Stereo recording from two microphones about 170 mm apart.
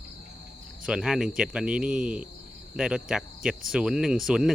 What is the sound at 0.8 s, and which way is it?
Speech, 5° right (ahead or behind).